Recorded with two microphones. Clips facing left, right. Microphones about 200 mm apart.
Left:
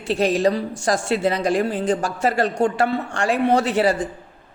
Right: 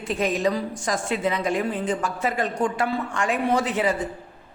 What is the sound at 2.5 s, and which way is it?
Speech, 70° left (ahead or behind).